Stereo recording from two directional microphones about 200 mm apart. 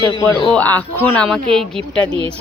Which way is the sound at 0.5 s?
10° left (ahead or behind).